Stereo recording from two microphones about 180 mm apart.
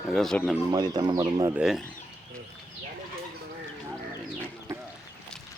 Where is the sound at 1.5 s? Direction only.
Centre (ahead or behind).